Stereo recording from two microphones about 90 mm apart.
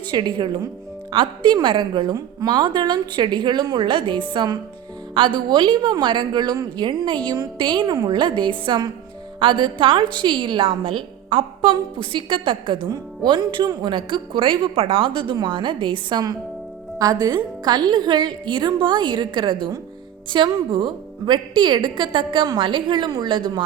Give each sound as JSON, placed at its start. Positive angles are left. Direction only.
{"t": 0.1, "sound": "a woman's voice", "side_deg": -60}
{"t": 12.9, "sound": "a woman's voice", "side_deg": -60}
{"t": 17.0, "sound": "a woman's voice", "side_deg": -45}